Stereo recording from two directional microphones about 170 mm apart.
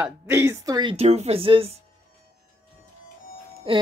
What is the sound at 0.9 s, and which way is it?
Speech, 40° right (ahead or behind).